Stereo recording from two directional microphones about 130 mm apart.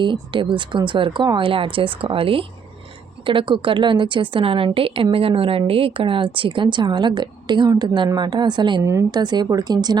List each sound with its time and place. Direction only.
0.0 s speech: 40° right (ahead or behind)
8.8 s a woman's voice: 20° right (ahead or behind)
9.1 s speech: 35° right (ahead or behind)